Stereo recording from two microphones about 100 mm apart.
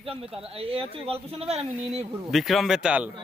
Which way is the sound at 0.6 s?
65° right (ahead or behind).